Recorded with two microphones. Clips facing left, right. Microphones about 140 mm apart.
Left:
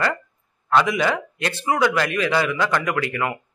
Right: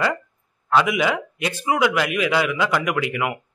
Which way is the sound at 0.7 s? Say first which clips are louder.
Even; 10° right (ahead or behind).